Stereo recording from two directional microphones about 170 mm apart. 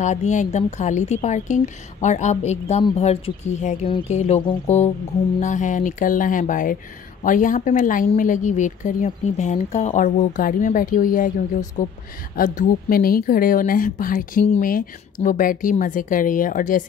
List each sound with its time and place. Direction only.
0.0 s a woman's voice: 45° left (ahead or behind)